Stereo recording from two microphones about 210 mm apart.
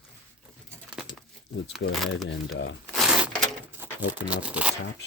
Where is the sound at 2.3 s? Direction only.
55° left (ahead or behind).